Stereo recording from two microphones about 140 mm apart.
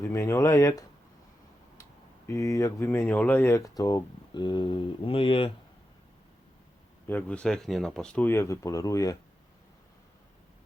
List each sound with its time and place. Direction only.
0.0 s speech: 20° left (ahead or behind); by 5.5 s 40° left (ahead or behind)
7.1 s speech: 10° left (ahead or behind)